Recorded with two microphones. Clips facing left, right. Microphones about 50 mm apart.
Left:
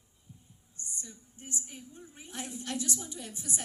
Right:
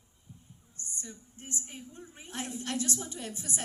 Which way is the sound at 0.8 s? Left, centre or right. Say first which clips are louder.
Right 2 dB; right.